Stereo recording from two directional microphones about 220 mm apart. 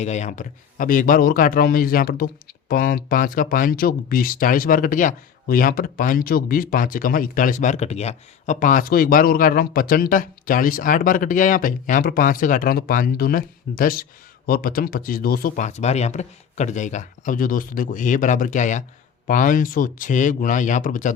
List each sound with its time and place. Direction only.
0.0 s a man's voice: 30° left (ahead or behind)